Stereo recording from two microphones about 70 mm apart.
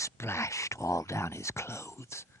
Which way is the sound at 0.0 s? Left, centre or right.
Left.